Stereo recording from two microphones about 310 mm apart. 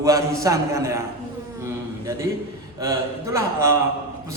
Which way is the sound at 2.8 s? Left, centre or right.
Centre.